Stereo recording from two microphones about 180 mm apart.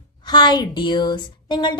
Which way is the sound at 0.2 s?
25° left (ahead or behind).